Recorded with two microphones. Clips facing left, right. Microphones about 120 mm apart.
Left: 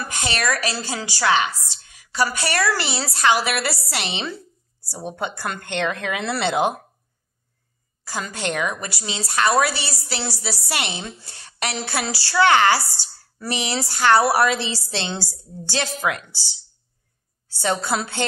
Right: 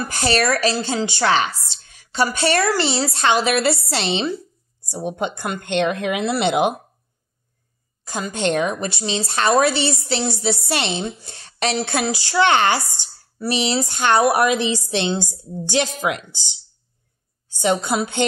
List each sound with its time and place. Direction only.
0.1 s a woman's voice: 35° right (ahead or behind); by 6.8 s 20° right (ahead or behind)
8.0 s a woman's voice: 20° right (ahead or behind)